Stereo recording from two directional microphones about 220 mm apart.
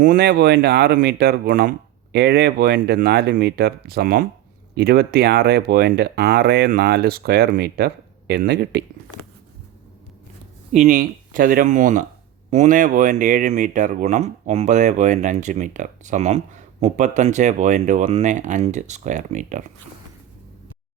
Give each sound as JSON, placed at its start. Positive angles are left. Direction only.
{"t": 0.0, "sound": "speech", "side_deg": -40}
{"t": 10.7, "sound": "speech", "side_deg": -35}